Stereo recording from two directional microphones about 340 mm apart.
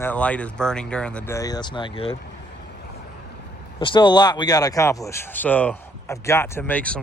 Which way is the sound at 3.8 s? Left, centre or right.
Centre.